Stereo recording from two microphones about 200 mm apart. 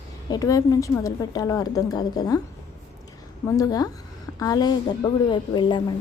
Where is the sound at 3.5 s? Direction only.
20° left (ahead or behind).